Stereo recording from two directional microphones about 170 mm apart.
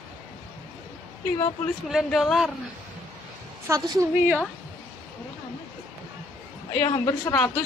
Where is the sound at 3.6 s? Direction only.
15° right (ahead or behind).